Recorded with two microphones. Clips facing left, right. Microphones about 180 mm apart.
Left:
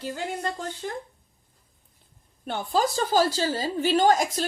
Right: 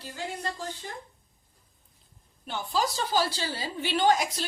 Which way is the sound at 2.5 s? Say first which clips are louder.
Left 4 dB; 50° left (ahead or behind).